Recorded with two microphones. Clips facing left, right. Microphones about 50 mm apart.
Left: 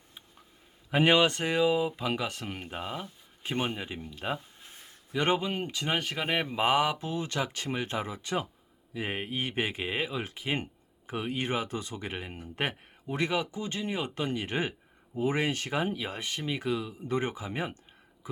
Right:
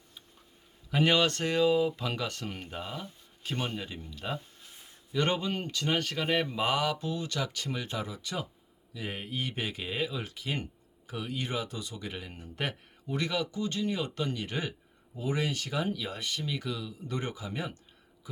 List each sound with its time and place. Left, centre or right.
0.9 s speech: left
5.1 s speech: centre